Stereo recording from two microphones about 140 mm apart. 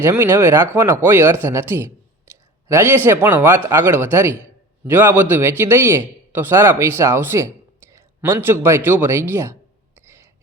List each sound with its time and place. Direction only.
0.0 s a man's voice: 15° right (ahead or behind)